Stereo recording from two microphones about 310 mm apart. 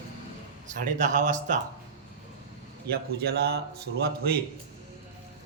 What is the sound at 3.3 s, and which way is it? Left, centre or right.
Speech, right.